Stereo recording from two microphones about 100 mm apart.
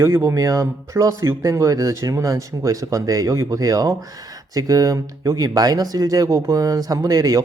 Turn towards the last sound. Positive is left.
turn(degrees=-35)  # may be behind; listen again after turning